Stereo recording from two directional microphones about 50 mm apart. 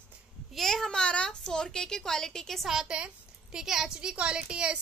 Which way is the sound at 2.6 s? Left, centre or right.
Centre.